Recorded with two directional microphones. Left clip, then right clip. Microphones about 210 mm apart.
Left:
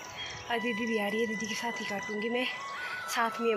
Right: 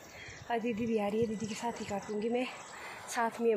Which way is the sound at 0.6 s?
40° left (ahead or behind).